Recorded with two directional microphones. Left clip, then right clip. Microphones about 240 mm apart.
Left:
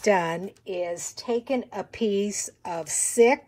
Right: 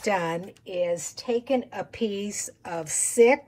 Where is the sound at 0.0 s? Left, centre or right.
Left.